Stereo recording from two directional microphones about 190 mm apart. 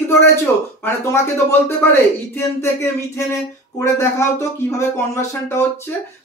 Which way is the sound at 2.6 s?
15° left (ahead or behind).